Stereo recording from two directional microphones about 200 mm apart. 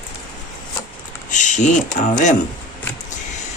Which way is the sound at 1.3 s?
35° left (ahead or behind).